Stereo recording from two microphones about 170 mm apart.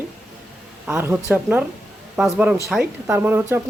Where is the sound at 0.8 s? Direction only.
10° right (ahead or behind).